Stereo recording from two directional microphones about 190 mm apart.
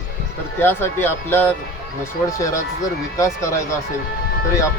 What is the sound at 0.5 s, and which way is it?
Speech, 10° left (ahead or behind).